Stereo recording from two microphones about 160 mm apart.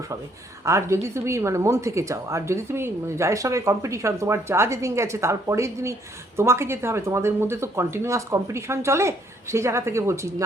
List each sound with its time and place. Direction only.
0.6 s a woman's voice: 20° right (ahead or behind)